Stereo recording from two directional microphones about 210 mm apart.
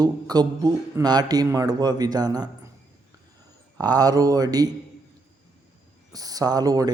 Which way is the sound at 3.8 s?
15° right (ahead or behind).